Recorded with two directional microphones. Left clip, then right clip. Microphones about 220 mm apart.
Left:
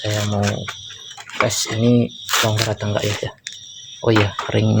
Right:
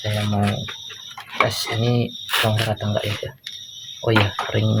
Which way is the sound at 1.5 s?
40° left (ahead or behind).